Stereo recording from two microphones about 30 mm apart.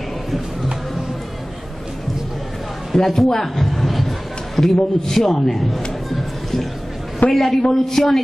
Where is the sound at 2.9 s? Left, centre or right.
Centre.